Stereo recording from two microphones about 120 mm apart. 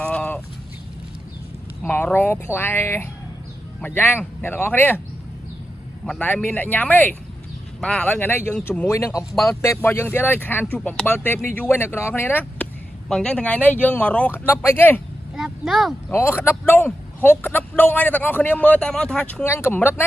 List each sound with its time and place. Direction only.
0.0 s fowl: 10° left (ahead or behind)
1.8 s speech: 10° left (ahead or behind)
6.0 s speech: 10° left (ahead or behind)
15.3 s a sound: 5° right (ahead or behind)
16.1 s speech: 20° left (ahead or behind)
19.4 s speech: 20° left (ahead or behind)